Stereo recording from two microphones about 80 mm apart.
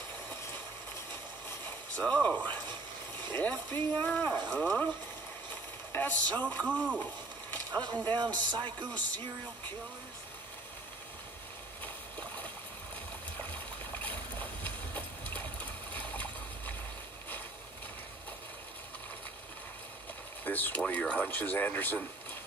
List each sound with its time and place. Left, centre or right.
2.0 s speech: centre
5.5 s vehicle: left
6.6 s speech: centre
7.7 s a man's voice: right
11.8 s a sound: centre
13.9 s a sound: left
20.4 s speech: left